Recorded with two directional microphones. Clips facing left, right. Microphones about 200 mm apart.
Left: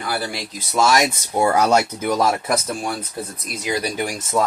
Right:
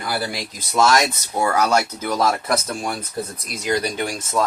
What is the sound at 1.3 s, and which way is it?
Speech, 20° left (ahead or behind).